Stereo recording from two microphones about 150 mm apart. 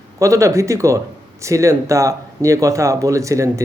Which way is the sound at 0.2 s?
20° right (ahead or behind).